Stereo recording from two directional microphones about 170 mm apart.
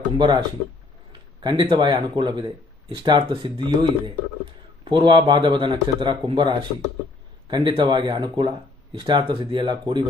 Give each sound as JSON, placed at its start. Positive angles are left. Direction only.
{"t": 0.2, "sound": "speech", "side_deg": -25}